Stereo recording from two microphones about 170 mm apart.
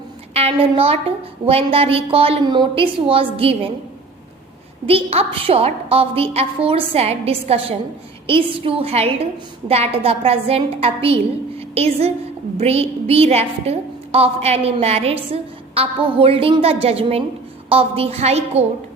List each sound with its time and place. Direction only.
0.3 s a woman's voice: 35° right (ahead or behind)
4.9 s a woman's voice: 35° right (ahead or behind)